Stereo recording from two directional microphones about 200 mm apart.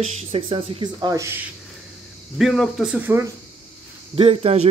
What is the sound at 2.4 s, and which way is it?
Speech, centre (ahead or behind).